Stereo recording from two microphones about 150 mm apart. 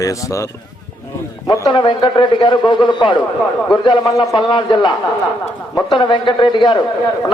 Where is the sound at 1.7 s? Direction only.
30° left (ahead or behind).